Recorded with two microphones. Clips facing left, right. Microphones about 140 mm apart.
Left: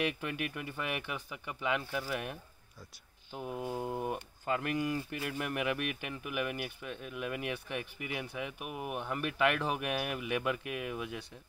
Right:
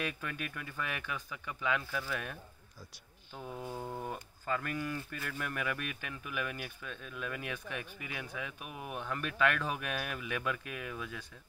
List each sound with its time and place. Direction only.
0.0 s speech: 15° left (ahead or behind)
3.3 s speech: 10° left (ahead or behind)